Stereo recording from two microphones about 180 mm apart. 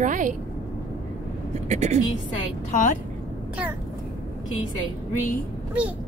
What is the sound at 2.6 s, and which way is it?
Speech, 40° left (ahead or behind).